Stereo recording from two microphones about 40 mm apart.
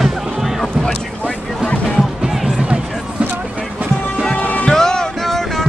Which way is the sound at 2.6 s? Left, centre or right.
Right.